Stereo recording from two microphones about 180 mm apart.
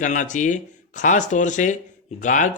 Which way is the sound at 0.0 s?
45° left (ahead or behind).